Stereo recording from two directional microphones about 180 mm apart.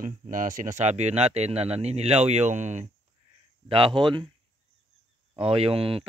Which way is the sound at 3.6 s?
30° right (ahead or behind).